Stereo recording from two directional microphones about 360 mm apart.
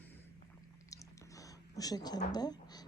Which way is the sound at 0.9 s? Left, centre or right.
Centre.